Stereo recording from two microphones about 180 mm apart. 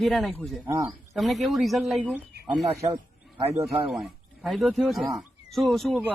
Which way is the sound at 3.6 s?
Centre (ahead or behind).